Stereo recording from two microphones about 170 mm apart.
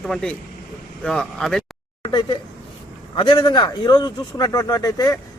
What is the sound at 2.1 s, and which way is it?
A man's voice, 30° left (ahead or behind).